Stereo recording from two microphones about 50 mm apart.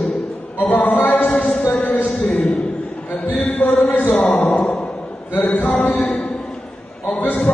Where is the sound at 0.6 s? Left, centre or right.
Left.